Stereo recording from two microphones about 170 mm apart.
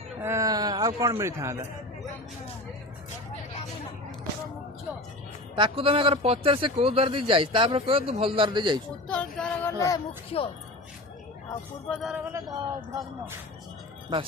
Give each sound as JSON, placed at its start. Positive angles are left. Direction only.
{"t": 0.2, "sound": "a sound", "side_deg": -15}
{"t": 5.5, "sound": "a man's voice", "side_deg": -30}
{"t": 9.0, "sound": "female singing", "side_deg": 5}
{"t": 9.7, "sound": "speech", "side_deg": 20}
{"t": 11.9, "sound": "speech", "side_deg": 0}
{"t": 12.3, "sound": "speech", "side_deg": -20}